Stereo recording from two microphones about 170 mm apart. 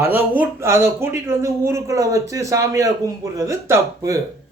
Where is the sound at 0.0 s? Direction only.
10° right (ahead or behind).